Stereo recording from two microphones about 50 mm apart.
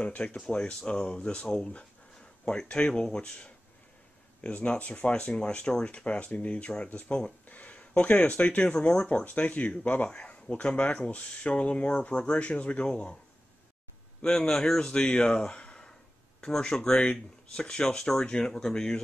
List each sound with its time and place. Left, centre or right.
0.0 s speech: left
7.4 s speech: left
9.2 s speech: left
14.2 s speech: left